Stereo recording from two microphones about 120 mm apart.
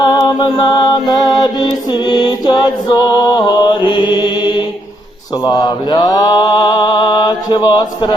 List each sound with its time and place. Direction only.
0.0 s music: 40° left (ahead or behind)